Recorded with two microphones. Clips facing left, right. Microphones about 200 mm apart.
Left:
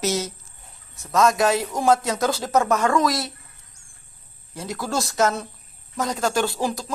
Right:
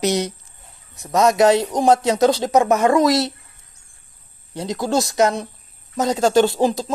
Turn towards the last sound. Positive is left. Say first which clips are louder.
# right 7 dB
turn(degrees=-20)  # may be behind; listen again after turning